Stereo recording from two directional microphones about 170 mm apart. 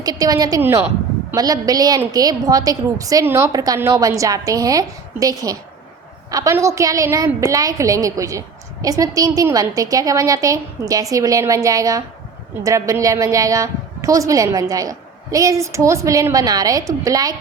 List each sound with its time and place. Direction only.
0.0 s a woman's voice: 20° right (ahead or behind)